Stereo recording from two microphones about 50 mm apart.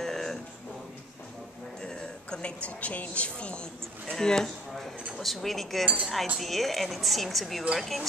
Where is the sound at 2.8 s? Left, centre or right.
Left; by 8.1 s centre.